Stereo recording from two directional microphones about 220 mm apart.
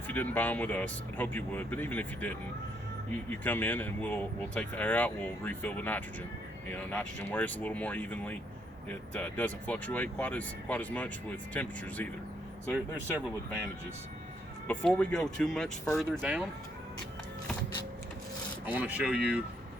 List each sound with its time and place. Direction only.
0.1 s speech: 10° left (ahead or behind)
3.4 s speech: 10° left (ahead or behind)
12.7 s speech: 10° right (ahead or behind)
14.7 s speech: 5° left (ahead or behind)
18.6 s speech: 10° right (ahead or behind)